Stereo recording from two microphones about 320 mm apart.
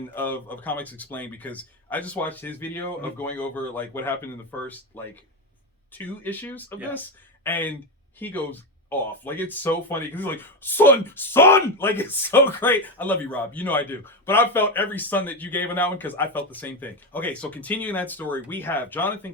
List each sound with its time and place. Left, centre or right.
0.1 s speech: centre